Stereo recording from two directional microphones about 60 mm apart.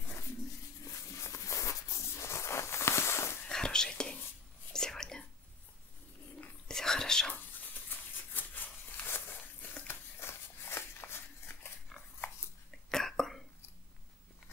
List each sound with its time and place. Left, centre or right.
0.8 s a sound: left
3.4 s whispering: centre
6.7 s whispering: centre
7.9 s a sound: left
11.9 s dog: centre
12.9 s whispering: centre